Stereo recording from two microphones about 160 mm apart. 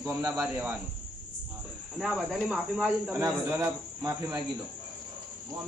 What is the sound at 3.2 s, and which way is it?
Speech, 25° right (ahead or behind).